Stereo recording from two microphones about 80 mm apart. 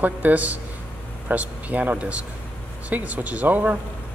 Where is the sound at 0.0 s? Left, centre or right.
Centre.